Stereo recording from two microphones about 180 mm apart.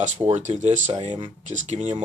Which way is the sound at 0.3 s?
40° right (ahead or behind).